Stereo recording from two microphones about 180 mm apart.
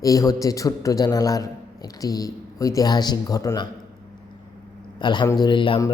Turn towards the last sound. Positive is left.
turn(degrees=25)  # may be behind; listen again after turning